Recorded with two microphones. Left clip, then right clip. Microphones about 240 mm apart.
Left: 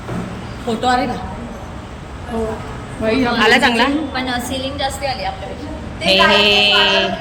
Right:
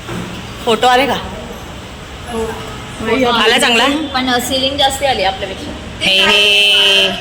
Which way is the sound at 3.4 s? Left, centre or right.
Centre.